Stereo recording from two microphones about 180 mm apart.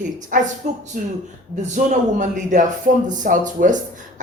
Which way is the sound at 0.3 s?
50° right (ahead or behind).